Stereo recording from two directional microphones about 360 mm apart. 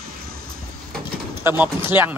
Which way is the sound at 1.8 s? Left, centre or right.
Centre.